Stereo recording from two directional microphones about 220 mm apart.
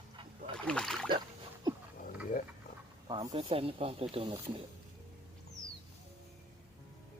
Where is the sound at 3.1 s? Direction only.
20° right (ahead or behind).